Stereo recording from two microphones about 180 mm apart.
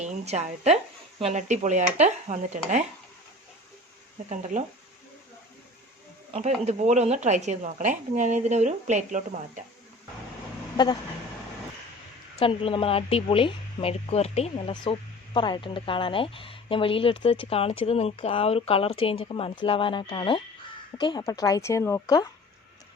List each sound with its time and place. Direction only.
0.0 s speech: 40° right (ahead or behind)
4.3 s speech: 45° right (ahead or behind)
6.3 s speech: 40° right (ahead or behind)
12.4 s a woman's voice: 30° left (ahead or behind)